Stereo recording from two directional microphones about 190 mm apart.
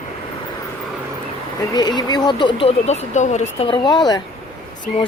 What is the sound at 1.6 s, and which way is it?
Speech, 20° left (ahead or behind).